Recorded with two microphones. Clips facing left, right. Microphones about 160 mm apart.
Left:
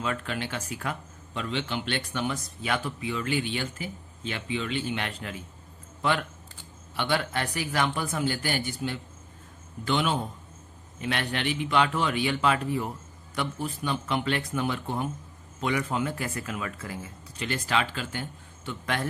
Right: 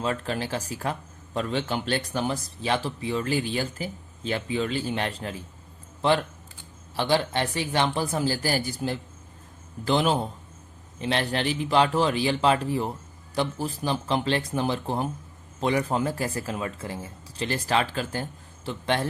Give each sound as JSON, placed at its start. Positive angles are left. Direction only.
{"t": 0.0, "sound": "speech", "side_deg": -35}